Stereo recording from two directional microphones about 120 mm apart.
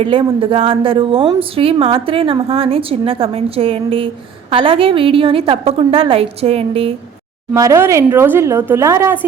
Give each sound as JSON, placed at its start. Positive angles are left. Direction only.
{"t": 0.0, "sound": "a woman's voice", "side_deg": -50}
{"t": 7.5, "sound": "speech", "side_deg": -25}